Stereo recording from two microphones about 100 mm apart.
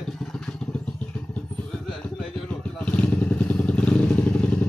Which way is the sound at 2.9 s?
15° left (ahead or behind).